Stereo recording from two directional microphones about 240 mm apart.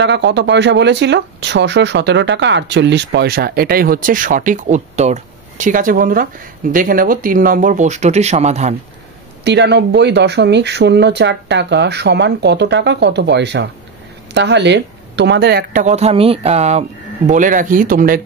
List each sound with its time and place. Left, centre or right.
0.0 s speech: right
9.4 s speech: right